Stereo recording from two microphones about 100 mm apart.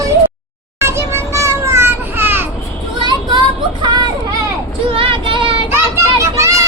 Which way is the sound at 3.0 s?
50° right (ahead or behind).